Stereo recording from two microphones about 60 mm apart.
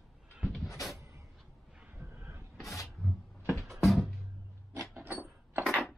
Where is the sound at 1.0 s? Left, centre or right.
Right.